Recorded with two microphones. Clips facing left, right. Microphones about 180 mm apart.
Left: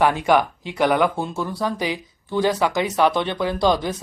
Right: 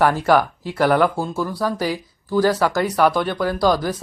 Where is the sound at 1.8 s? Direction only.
20° left (ahead or behind).